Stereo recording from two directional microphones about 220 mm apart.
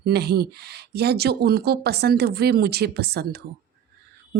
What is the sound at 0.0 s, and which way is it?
Speech, 45° right (ahead or behind).